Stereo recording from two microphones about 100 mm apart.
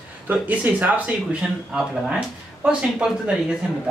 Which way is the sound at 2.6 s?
5° right (ahead or behind).